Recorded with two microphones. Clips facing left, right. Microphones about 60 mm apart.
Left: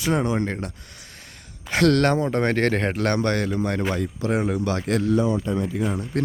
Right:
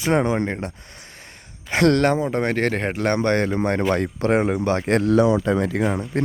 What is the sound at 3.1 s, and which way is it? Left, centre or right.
Speech, right.